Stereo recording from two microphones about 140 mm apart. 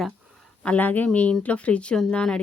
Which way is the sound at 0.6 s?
10° left (ahead or behind).